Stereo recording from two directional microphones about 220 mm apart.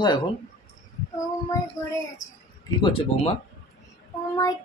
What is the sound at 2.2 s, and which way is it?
Speech, 35° left (ahead or behind).